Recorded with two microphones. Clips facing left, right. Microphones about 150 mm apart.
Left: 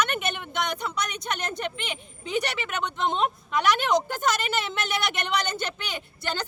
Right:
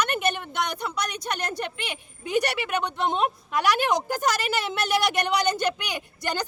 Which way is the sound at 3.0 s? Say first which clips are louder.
Left 2 dB; 10° right (ahead or behind).